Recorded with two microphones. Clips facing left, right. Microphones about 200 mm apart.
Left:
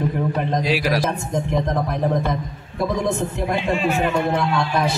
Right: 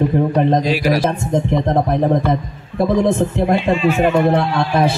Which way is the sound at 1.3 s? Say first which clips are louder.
Right 6 dB; 25° right (ahead or behind).